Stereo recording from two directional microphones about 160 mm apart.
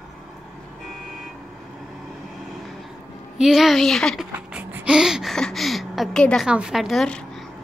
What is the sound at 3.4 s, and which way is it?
A woman's voice, centre (ahead or behind).